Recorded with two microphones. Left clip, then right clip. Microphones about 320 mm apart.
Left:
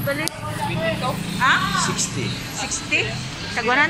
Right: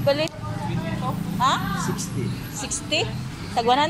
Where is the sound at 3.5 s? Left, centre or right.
Right.